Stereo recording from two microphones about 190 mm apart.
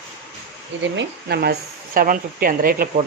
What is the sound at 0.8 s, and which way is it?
Speech, 65° right (ahead or behind).